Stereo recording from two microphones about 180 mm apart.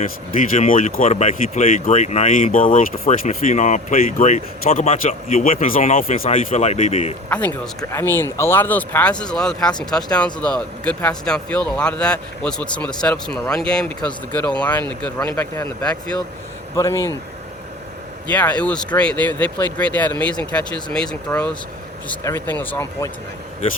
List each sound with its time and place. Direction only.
0.0 s speech: 45° left (ahead or behind)
7.3 s speech: 10° left (ahead or behind)
16.7 s speech: 15° left (ahead or behind)
18.3 s speech: 10° left (ahead or behind)